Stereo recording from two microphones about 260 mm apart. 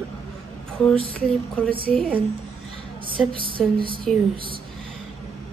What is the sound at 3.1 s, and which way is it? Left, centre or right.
Speech, centre.